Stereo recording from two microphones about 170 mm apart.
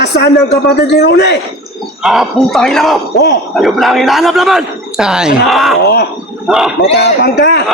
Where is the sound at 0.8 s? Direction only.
75° left (ahead or behind).